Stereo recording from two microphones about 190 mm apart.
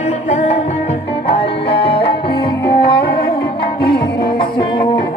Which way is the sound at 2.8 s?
55° left (ahead or behind).